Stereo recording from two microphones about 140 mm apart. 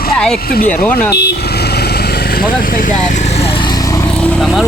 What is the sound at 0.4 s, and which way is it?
Speech, 90° left.